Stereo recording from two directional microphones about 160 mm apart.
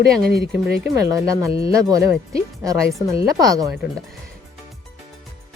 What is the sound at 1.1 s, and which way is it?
Speech, 20° right (ahead or behind).